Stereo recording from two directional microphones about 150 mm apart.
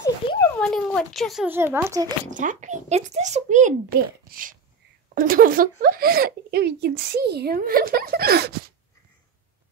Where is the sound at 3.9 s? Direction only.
75° right (ahead or behind); by 8.6 s 90° right.